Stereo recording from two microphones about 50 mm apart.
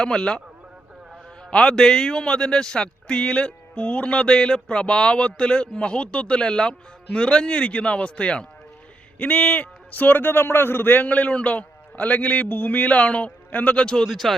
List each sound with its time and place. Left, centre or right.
0.0 s speech: centre
1.5 s speech: centre
3.8 s a man's voice: left
14.0 s speech: centre